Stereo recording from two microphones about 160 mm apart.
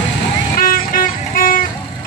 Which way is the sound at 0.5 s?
65° left (ahead or behind).